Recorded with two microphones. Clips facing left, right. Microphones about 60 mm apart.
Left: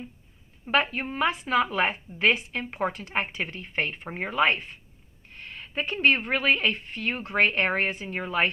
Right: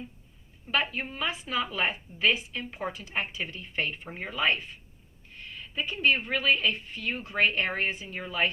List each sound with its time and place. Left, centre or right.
0.7 s a woman's voice: left